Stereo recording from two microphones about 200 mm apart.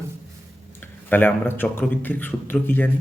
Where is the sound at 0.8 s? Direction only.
10° left (ahead or behind).